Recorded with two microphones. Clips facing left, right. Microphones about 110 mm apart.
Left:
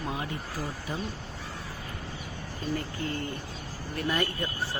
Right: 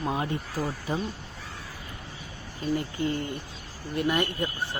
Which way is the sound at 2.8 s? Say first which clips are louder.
Right 4 dB; 20° right (ahead or behind).